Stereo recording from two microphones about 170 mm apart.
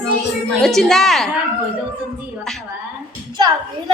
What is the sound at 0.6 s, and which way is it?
Speech, centre (ahead or behind).